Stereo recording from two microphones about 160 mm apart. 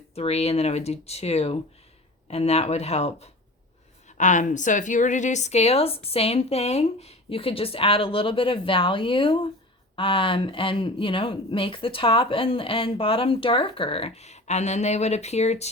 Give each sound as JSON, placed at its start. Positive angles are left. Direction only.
{"t": 0.1, "sound": "speech", "side_deg": 40}